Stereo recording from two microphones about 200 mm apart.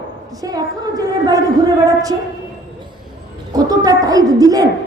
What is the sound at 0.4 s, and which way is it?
A woman's voice, 20° right (ahead or behind).